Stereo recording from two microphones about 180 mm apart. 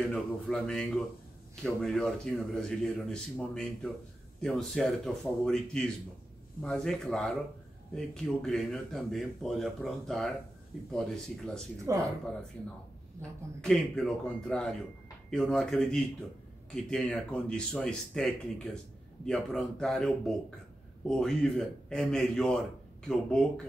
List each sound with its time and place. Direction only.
0.0 s a man's voice: 5° left (ahead or behind)
11.8 s speech: 15° right (ahead or behind)
13.6 s a man's voice: 5° left (ahead or behind)